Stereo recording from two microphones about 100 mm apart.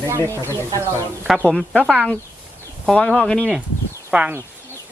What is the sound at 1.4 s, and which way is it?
Livestock, 10° left (ahead or behind).